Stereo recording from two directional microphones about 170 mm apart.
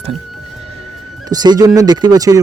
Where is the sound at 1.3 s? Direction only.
25° right (ahead or behind).